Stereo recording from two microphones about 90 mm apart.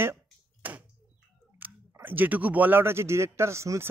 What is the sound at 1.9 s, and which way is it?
Speech, 20° right (ahead or behind).